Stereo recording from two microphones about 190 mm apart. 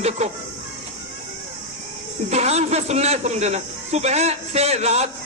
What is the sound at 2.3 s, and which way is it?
A man's voice, 35° right (ahead or behind).